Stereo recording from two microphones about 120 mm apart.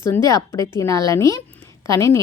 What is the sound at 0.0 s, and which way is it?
A woman's voice, 25° left (ahead or behind).